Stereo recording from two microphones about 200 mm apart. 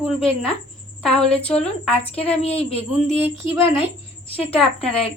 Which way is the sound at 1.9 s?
30° left (ahead or behind).